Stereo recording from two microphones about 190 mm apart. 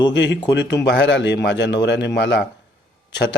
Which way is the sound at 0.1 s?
70° left (ahead or behind).